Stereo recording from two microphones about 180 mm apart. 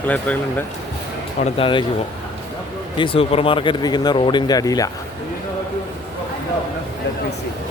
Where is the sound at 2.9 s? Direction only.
30° left (ahead or behind).